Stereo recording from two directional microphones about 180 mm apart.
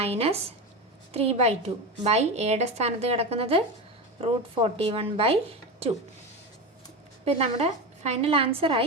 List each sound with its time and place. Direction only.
0.0 s a woman's voice: 35° right (ahead or behind)
7.3 s a woman's voice: 35° right (ahead or behind)